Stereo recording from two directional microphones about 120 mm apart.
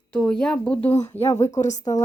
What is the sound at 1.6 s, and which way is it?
Speech, 85° left.